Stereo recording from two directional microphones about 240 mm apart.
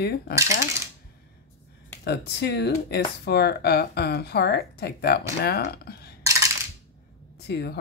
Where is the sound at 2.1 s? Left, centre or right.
Left.